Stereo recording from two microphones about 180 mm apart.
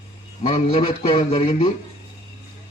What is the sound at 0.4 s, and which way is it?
A man's voice, 30° left (ahead or behind).